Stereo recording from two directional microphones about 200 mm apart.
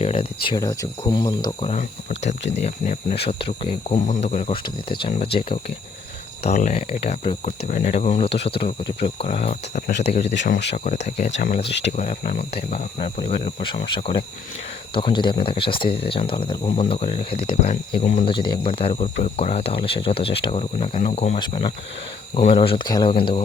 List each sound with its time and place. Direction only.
0.0 s speech: 30° left (ahead or behind)
1.7 s speech: 40° left (ahead or behind)
11.6 s speech: 60° left (ahead or behind)
11.9 s speech: 35° left (ahead or behind)
18.3 s speech: 25° left (ahead or behind)
21.3 s speech: 25° left (ahead or behind)